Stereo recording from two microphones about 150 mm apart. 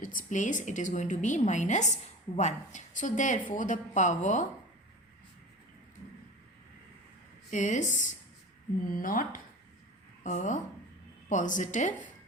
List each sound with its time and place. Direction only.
0.0 s a woman's voice: 65° left (ahead or behind)
7.5 s a woman's voice: 55° left (ahead or behind)
8.9 s speech: 65° left (ahead or behind)
10.2 s a woman's voice: 55° left (ahead or behind)